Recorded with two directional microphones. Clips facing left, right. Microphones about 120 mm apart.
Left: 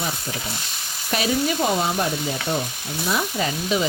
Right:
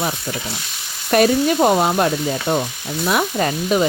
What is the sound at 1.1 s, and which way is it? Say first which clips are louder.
Speech: right 8 dB; 50° right (ahead or behind).